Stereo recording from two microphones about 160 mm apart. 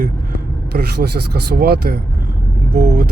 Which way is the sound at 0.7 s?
90° right.